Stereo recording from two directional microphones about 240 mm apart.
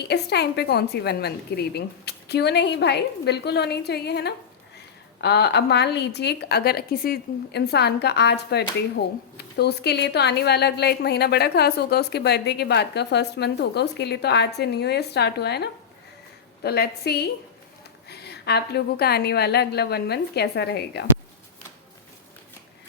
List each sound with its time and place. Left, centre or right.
0.0 s a woman's voice: left